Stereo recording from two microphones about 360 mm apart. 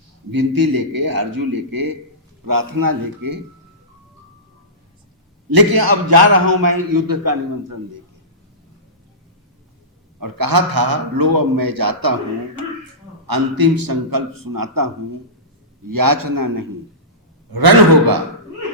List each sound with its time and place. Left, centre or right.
0.3 s a man's voice: right
5.5 s a man's voice: right
10.2 s a man's voice: right
13.2 s a man's voice: right
17.5 s a man's voice: right